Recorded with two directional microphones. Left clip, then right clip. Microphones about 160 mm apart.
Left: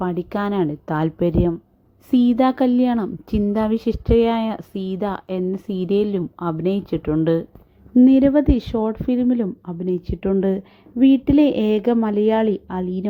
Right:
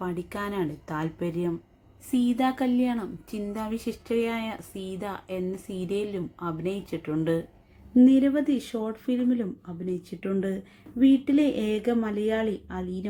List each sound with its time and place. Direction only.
0.0 s a woman's voice: 40° left (ahead or behind)